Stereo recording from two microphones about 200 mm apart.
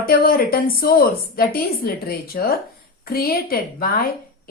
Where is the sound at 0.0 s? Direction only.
45° left (ahead or behind).